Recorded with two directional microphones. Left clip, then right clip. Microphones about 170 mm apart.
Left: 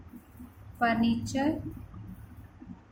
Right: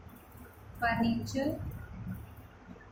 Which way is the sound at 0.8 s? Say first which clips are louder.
Left 3 dB; 65° left (ahead or behind).